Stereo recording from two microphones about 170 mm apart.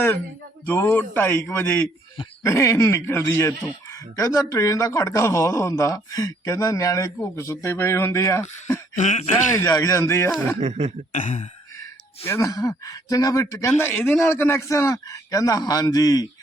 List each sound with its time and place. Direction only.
0.6 s speech: 10° left (ahead or behind)
9.0 s speech: 45° left (ahead or behind)
9.6 s speech: 20° left (ahead or behind)
10.6 s cough: 40° right (ahead or behind)
11.1 s speech: 45° left (ahead or behind)
12.2 s speech: 15° left (ahead or behind)